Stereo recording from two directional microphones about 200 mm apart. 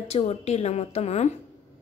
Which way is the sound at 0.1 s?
35° left (ahead or behind).